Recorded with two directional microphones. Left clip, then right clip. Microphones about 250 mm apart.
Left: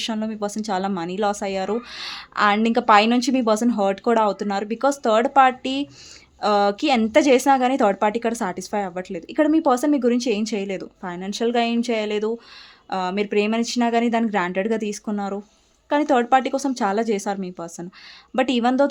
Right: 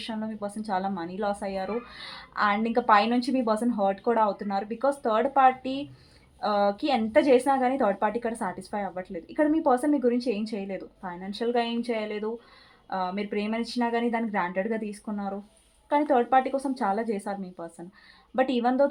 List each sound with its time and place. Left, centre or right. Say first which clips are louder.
0.0 s speech: left 8 dB; left